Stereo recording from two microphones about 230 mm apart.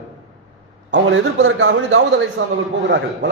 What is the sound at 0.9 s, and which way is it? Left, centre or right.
A man's voice, right.